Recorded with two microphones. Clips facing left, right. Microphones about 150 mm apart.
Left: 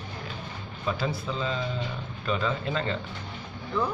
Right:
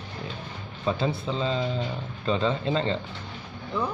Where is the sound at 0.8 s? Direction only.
25° right (ahead or behind).